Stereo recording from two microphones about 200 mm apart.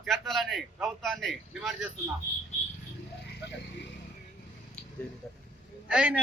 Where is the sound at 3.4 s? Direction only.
60° left (ahead or behind).